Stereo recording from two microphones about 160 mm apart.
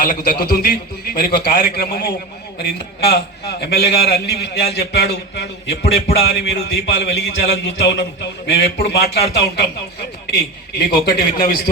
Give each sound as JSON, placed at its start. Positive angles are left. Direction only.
{"t": 0.0, "sound": "a man's voice", "side_deg": 65}
{"t": 2.6, "sound": "a man's voice", "side_deg": 90}
{"t": 3.6, "sound": "a man's voice", "side_deg": 80}
{"t": 4.0, "sound": "a man's voice", "side_deg": 90}
{"t": 10.9, "sound": "a man's voice", "side_deg": 70}